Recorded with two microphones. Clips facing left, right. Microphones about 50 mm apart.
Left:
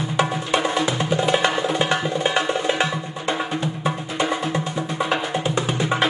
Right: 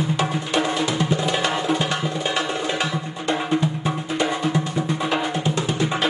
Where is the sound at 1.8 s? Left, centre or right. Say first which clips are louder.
Left 3 dB; left.